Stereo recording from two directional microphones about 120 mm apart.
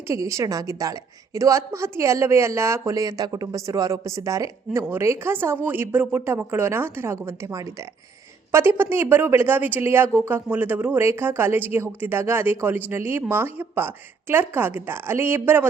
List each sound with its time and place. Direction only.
0.1 s a woman's voice: 25° right (ahead or behind)